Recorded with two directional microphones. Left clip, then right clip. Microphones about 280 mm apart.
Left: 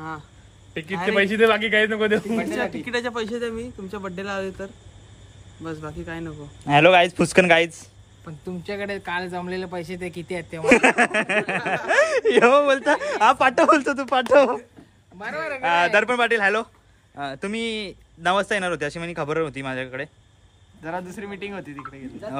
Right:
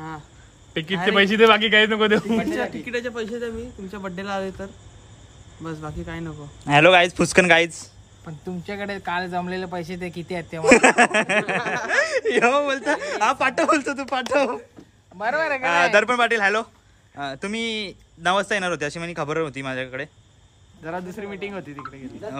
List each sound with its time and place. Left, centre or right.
1.0 s speech: right
2.5 s speech: centre
2.8 s a man's voice: centre
3.9 s a man's voice: centre
15.1 s speech: centre
15.6 s speech: centre